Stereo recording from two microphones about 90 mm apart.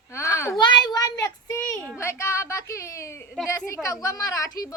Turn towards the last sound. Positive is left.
turn(degrees=35)  # may be behind; listen again after turning